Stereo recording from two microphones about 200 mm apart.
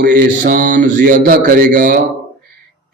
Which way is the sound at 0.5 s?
40° right (ahead or behind).